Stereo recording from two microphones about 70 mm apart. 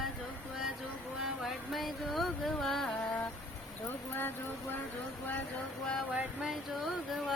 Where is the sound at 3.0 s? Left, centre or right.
Centre.